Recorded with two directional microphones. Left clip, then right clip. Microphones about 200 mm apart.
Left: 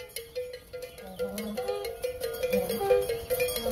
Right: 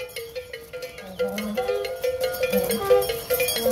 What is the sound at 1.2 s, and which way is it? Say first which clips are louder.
Music: right 8 dB; 40° left (ahead or behind).